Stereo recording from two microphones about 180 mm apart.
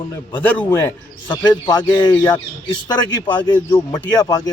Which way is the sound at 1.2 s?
25° left (ahead or behind).